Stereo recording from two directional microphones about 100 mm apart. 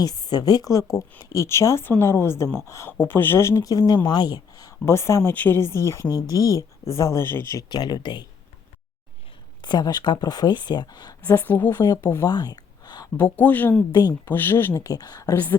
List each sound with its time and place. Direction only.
0.0 s speech: 40° left (ahead or behind); by 7.6 s 25° left (ahead or behind)
7.7 s speech: 45° left (ahead or behind)
9.6 s speech: 45° left (ahead or behind)
11.3 s speech: 20° left (ahead or behind)
12.2 s gasp: 40° left (ahead or behind)
13.1 s speech: 15° left (ahead or behind); by 15.4 s 40° left (ahead or behind)